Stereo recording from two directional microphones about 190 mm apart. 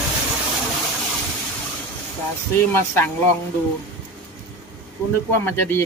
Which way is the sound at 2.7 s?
10° left (ahead or behind).